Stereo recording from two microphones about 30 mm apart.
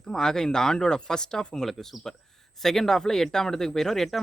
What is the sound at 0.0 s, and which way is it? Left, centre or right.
Speech, centre.